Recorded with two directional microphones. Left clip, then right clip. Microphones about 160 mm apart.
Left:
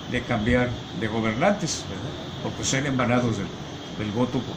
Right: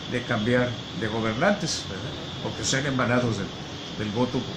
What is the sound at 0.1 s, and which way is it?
Speech, 15° left (ahead or behind).